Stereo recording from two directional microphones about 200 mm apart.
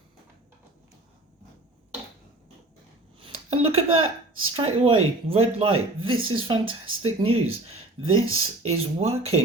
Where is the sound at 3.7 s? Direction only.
90° right.